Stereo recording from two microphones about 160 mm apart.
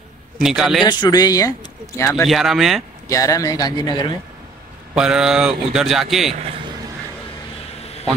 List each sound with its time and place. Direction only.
0.4 s speech: 5° right (ahead or behind)
0.8 s speech: 25° left (ahead or behind)
2.2 s speech: centre (ahead or behind)
3.1 s speech: 20° left (ahead or behind)
4.9 s speech: 5° right (ahead or behind)